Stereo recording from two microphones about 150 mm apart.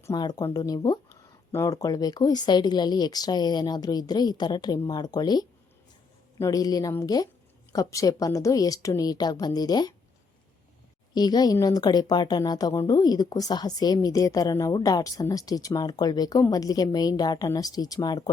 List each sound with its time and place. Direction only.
0.0 s a woman's voice: 25° left (ahead or behind)
11.1 s a woman's voice: 25° left (ahead or behind)